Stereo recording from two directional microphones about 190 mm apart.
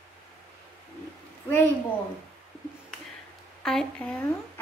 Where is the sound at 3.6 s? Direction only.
5° left (ahead or behind).